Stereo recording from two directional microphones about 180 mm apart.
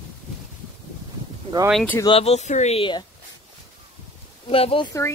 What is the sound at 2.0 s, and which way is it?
Speech, 30° left (ahead or behind).